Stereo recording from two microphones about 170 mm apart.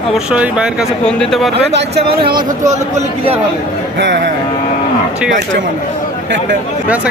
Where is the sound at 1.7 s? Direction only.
85° right.